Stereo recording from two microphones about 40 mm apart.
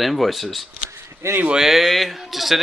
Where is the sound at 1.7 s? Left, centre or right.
Centre.